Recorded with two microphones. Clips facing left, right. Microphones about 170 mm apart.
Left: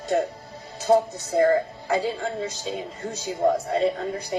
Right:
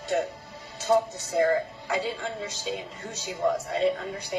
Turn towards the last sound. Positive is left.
turn(degrees=40)  # may be behind; listen again after turning